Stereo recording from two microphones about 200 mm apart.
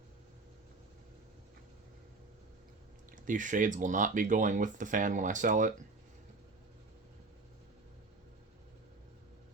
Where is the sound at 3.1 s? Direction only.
40° right (ahead or behind).